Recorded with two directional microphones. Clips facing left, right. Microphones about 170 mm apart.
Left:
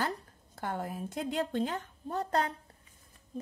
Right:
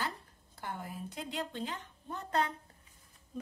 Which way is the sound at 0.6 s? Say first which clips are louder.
Left 6 dB; 45° left (ahead or behind).